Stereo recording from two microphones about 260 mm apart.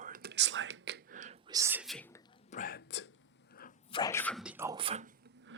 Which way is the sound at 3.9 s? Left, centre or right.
Centre.